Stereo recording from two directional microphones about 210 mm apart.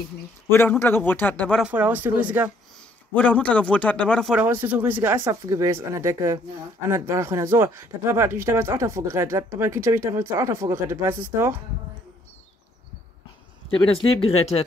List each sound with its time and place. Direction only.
0.5 s a man's voice: 10° left (ahead or behind)
1.6 s speech: 5° right (ahead or behind)
3.2 s speech: 5° left (ahead or behind); by 11.6 s 10° right (ahead or behind)
13.7 s speech: 25° left (ahead or behind)